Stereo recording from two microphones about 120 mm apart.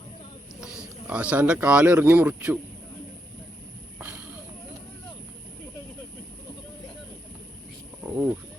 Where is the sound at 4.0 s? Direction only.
15° right (ahead or behind).